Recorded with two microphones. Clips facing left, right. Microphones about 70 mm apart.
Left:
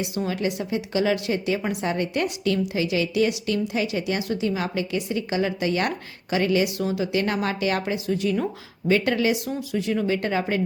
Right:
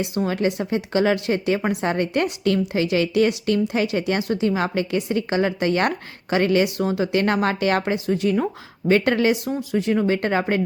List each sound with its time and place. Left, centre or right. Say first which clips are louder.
0.0 s a woman's voice: right 4 dB; right